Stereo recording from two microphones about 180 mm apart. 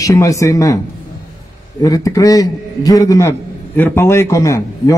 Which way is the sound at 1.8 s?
20° left (ahead or behind).